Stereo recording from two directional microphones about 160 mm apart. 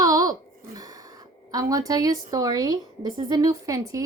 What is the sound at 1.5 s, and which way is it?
A woman's voice, 20° right (ahead or behind).